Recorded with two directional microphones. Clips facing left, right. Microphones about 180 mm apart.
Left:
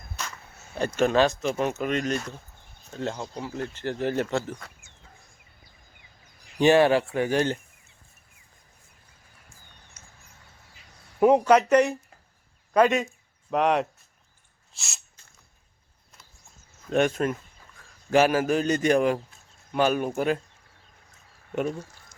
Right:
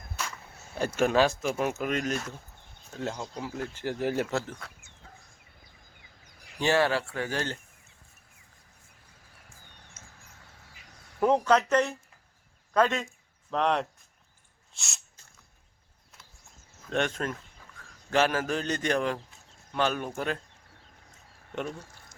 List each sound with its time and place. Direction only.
0.8 s speech: 10° right (ahead or behind)
6.6 s a man's voice: 20° left (ahead or behind)
10.0 s a sound: 25° right (ahead or behind)
11.2 s a man's voice: 15° left (ahead or behind)
16.9 s a man's voice: 10° left (ahead or behind)